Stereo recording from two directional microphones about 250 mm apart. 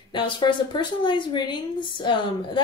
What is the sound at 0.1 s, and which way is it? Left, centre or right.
Speech, centre.